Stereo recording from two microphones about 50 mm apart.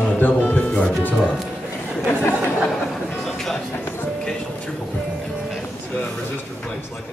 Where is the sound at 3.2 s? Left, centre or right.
Centre.